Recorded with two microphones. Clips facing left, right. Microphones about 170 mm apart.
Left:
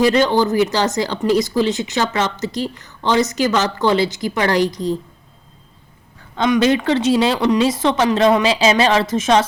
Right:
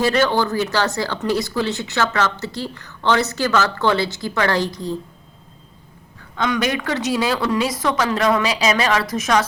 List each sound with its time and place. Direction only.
0.0 s speech: 15° left (ahead or behind)
6.3 s speech: 25° left (ahead or behind)